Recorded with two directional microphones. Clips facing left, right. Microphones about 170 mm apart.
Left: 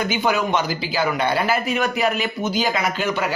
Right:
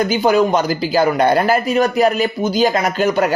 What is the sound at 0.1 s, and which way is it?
Speech, 35° right (ahead or behind).